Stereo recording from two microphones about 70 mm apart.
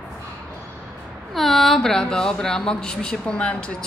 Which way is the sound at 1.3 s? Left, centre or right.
Centre.